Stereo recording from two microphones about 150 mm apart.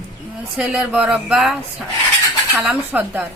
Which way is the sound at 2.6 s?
10° right (ahead or behind).